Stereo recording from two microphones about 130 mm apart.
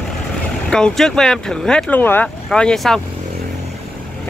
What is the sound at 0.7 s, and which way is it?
Speech, 5° left (ahead or behind).